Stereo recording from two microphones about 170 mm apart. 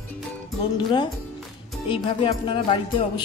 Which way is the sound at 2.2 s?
30° left (ahead or behind).